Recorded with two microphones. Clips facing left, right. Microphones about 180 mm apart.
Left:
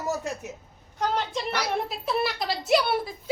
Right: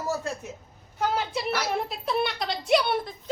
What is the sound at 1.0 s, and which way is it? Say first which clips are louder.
A child's voice: even; 5° right (ahead or behind).